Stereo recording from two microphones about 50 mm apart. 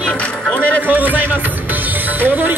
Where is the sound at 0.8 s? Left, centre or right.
Right.